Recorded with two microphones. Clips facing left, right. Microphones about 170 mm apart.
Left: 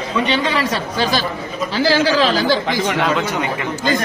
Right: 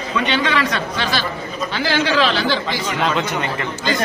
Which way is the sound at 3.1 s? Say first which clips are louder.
Left 2 dB; 5° left (ahead or behind).